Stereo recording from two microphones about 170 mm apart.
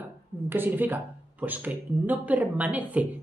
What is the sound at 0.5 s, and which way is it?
Speech, 10° right (ahead or behind).